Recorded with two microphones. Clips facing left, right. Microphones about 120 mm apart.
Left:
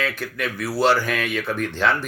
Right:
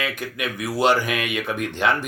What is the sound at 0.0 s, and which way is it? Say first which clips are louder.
Speech: left 1 dB; 15° right (ahead or behind).